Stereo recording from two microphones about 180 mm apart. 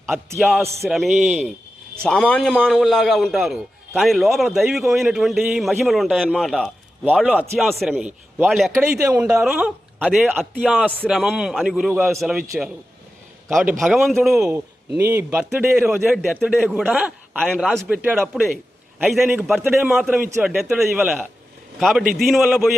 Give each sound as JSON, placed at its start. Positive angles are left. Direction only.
{"t": 0.3, "sound": "a man's voice", "side_deg": 0}
{"t": 8.7, "sound": "speech", "side_deg": -15}
{"t": 9.4, "sound": "a man's voice", "side_deg": -5}
{"t": 13.5, "sound": "a man's voice", "side_deg": 0}
{"t": 16.1, "sound": "a man's voice", "side_deg": 0}
{"t": 17.4, "sound": "a man's voice", "side_deg": 5}